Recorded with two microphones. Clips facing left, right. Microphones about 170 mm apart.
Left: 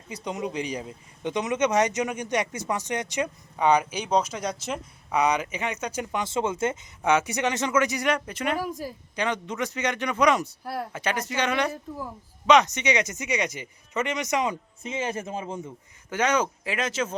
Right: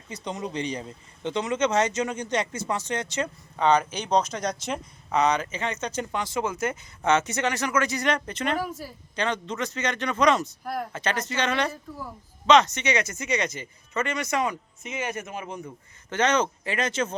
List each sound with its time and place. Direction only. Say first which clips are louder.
0.1 s speech: left 1 dB; 10° left (ahead or behind); by 6.7 s 25° left (ahead or behind)
7.0 s speech: even; 10° left (ahead or behind); by 15.7 s 30° left (ahead or behind)
16.0 s speech: right 1 dB; 10° left (ahead or behind)